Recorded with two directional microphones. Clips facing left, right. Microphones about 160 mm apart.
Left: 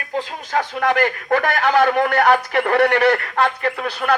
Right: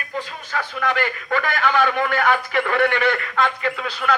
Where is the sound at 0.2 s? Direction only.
70° left (ahead or behind).